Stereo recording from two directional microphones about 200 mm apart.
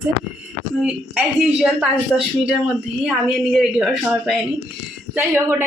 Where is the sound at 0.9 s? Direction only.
5° right (ahead or behind).